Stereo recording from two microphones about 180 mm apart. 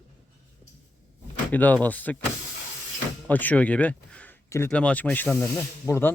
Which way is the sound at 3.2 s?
10° left (ahead or behind).